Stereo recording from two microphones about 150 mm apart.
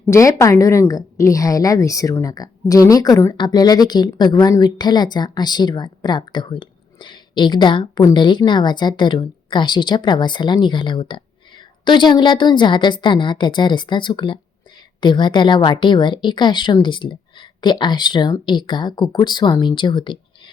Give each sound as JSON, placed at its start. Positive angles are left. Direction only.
{"t": 0.1, "sound": "a woman's voice", "side_deg": 20}